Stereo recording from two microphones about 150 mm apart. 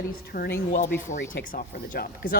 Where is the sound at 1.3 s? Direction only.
75° left (ahead or behind).